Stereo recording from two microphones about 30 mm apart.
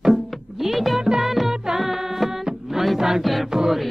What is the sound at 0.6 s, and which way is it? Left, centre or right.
Music, centre.